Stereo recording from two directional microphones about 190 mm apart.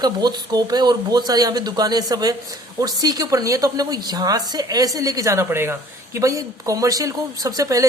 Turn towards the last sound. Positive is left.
turn(degrees=-15)  # may be behind; listen again after turning